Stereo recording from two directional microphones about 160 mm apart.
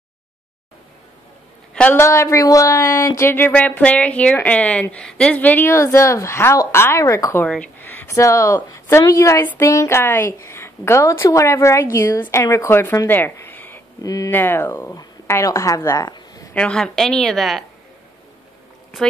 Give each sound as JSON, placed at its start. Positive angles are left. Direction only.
{"t": 1.7, "sound": "a woman's voice", "side_deg": 5}
{"t": 2.0, "sound": "speech", "side_deg": 20}
{"t": 7.4, "sound": "speech", "side_deg": 5}
{"t": 16.5, "sound": "a woman's voice", "side_deg": 5}